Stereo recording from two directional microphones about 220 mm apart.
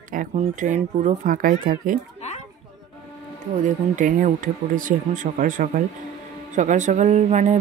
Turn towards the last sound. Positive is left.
turn(degrees=-30)  # may be behind; listen again after turning